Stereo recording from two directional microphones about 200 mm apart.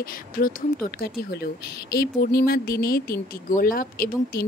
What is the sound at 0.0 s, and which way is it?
Speech, 45° left (ahead or behind).